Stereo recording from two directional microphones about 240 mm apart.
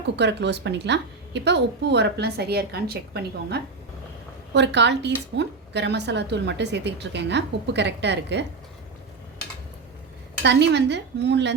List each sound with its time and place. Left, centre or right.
0.2 s a woman's voice: right
10.4 s a woman's voice: right